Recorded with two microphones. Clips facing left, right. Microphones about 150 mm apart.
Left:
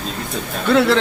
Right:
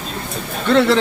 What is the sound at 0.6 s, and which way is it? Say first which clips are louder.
Speech: right 1 dB; centre (ahead or behind).